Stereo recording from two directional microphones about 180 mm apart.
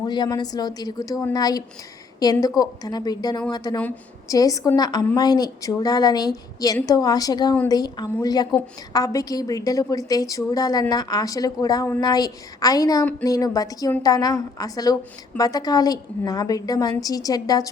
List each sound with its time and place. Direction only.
0.0 s a woman's voice: 20° left (ahead or behind)
3.8 s a woman's voice: 10° left (ahead or behind)